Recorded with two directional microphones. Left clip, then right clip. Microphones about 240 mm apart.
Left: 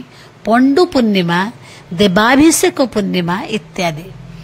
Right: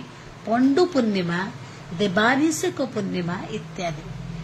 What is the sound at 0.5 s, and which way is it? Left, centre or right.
Speech, left.